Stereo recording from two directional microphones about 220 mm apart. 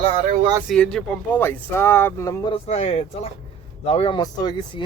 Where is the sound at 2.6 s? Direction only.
25° left (ahead or behind).